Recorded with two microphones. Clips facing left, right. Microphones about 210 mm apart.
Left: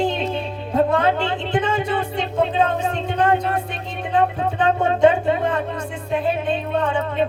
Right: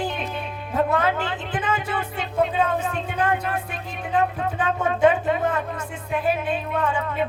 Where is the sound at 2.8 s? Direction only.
25° left (ahead or behind).